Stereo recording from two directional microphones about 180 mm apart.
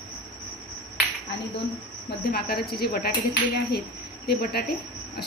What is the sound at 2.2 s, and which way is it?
A woman's voice, 60° left (ahead or behind).